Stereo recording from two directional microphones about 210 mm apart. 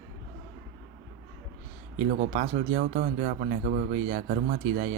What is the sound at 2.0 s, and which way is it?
Speech, 35° right (ahead or behind).